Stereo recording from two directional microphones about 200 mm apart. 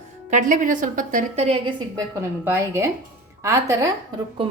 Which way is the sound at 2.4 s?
10° right (ahead or behind).